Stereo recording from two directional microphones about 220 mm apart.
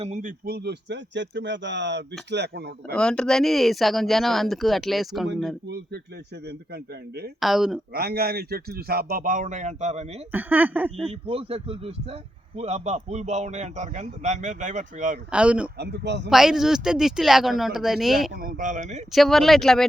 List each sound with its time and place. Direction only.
0.0 s a man's voice: 35° right (ahead or behind)
2.9 s speech: 5° left (ahead or behind)
5.6 s a man's voice: 45° right (ahead or behind)
7.3 s speech: centre (ahead or behind)
7.9 s a man's voice: 45° right (ahead or behind)
10.3 s speech: 10° right (ahead or behind)
11.0 s a man's voice: 25° right (ahead or behind)
15.3 s speech: 5° right (ahead or behind)
15.8 s a man's voice: 50° right (ahead or behind)
16.3 s speech: centre (ahead or behind)
18.3 s a man's voice: 40° right (ahead or behind)
19.1 s speech: centre (ahead or behind)